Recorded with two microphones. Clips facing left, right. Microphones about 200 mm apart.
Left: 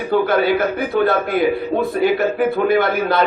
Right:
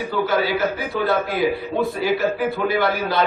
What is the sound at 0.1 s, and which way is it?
A man's voice, 55° left (ahead or behind).